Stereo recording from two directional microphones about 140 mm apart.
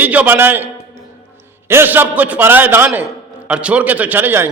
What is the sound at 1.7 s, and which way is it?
A man's voice, 15° right (ahead or behind).